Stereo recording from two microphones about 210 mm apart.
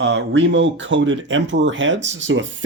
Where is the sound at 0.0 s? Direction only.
60° right (ahead or behind).